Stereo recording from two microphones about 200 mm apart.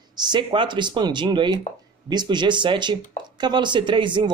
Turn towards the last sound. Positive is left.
turn(degrees=-25)  # may be behind; listen again after turning